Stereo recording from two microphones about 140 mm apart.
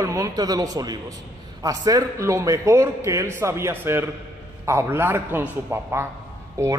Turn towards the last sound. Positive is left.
turn(degrees=-20)  # may be behind; listen again after turning